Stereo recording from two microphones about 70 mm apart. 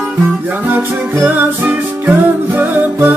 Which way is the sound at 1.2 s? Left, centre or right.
Right.